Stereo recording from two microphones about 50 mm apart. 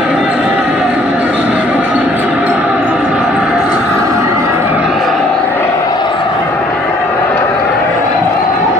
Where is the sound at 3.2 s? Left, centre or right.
Centre.